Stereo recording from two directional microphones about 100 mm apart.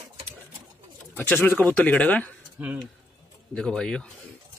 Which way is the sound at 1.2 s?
20° left (ahead or behind).